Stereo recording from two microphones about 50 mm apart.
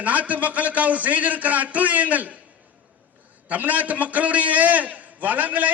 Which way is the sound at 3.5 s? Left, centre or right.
Right.